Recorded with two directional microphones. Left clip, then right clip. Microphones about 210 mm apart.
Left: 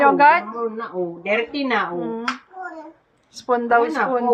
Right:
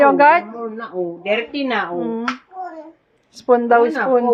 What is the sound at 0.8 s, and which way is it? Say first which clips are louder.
Speech: right 2 dB; 25° right (ahead or behind).